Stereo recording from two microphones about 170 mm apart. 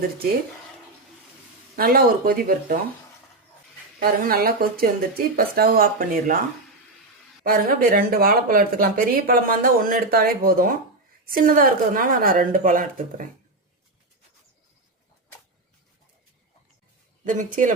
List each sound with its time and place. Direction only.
1.7 s speech: 60° right (ahead or behind)
4.0 s speech: 60° right (ahead or behind)
7.4 s speech: 60° right (ahead or behind)
17.2 s speech: 50° right (ahead or behind)